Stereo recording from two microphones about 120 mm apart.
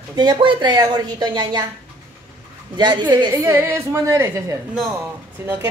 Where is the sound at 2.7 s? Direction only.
40° right (ahead or behind).